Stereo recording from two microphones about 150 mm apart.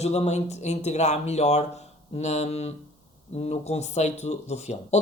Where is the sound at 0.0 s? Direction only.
45° left (ahead or behind).